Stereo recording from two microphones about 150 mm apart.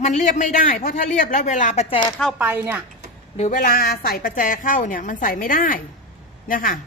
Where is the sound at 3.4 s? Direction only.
60° left (ahead or behind).